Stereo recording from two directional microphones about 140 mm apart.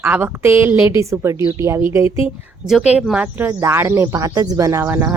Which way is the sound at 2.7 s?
5° right (ahead or behind).